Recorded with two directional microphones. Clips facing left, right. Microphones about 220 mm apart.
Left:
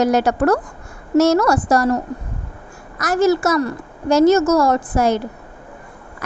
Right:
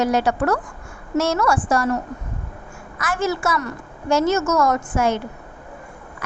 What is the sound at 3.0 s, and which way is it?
A woman's voice, 40° left (ahead or behind).